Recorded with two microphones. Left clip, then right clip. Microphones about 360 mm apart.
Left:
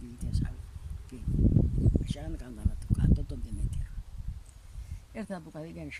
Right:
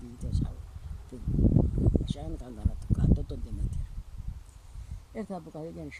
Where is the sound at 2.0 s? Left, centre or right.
Centre.